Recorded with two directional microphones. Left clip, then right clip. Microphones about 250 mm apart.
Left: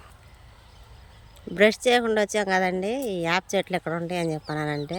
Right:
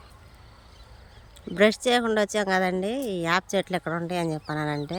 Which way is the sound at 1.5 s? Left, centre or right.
Centre.